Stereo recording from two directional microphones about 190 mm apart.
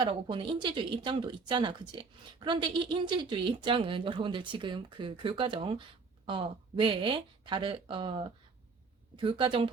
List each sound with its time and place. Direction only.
0.0 s speech: 25° right (ahead or behind)